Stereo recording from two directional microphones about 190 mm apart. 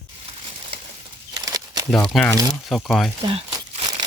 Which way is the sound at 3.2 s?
30° right (ahead or behind).